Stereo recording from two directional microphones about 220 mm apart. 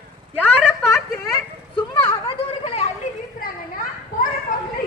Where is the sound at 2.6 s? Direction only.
30° left (ahead or behind).